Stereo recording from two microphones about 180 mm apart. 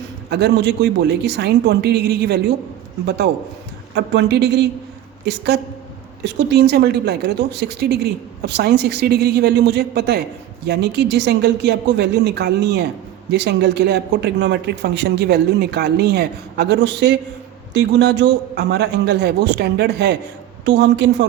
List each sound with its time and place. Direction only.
0.3 s a man's voice: 70° right (ahead or behind)
3.9 s a man's voice: 75° right (ahead or behind)